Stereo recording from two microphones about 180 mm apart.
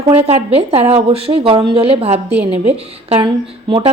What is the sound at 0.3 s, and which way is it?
A woman's voice, 35° right (ahead or behind).